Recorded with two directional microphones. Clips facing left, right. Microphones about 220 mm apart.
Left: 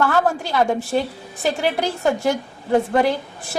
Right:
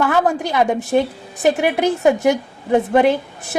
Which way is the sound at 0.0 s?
15° right (ahead or behind).